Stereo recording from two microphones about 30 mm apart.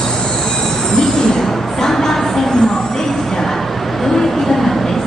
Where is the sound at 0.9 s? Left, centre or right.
Left.